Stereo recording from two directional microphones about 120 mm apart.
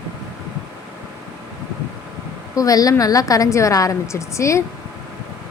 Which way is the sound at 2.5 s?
30° left (ahead or behind).